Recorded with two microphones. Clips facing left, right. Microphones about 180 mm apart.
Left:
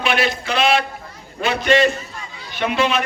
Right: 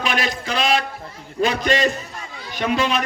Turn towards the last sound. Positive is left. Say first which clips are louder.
# left 1 dB
turn(degrees=-40)  # may be behind; listen again after turning